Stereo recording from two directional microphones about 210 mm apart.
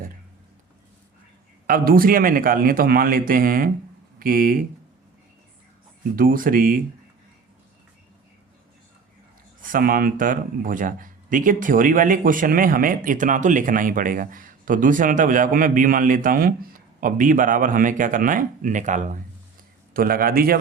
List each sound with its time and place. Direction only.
1.6 s a man's voice: 45° right (ahead or behind)
6.1 s speech: 40° right (ahead or behind)
9.6 s a man's voice: 40° right (ahead or behind)